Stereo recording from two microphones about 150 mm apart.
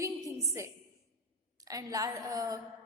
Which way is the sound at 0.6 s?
20° right (ahead or behind).